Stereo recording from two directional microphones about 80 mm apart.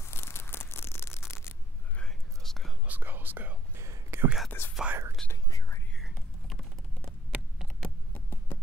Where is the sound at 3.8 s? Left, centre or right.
Right.